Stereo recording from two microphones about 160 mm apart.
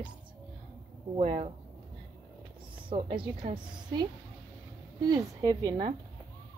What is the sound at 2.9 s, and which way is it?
A woman's voice, 35° right (ahead or behind).